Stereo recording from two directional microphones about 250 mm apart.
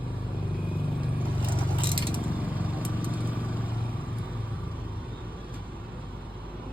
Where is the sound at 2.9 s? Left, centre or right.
Centre.